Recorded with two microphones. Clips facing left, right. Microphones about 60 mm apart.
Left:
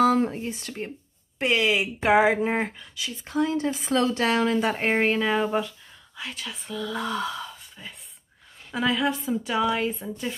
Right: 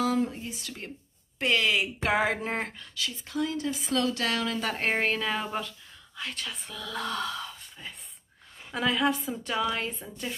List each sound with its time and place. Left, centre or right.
0.0 s speech: left
1.4 s speech: centre
3.3 s a woman's voice: left
4.6 s a woman's voice: centre